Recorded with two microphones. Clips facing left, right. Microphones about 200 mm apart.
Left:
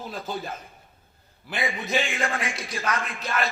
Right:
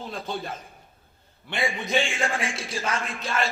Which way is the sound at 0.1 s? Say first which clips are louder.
Even; 5° left (ahead or behind).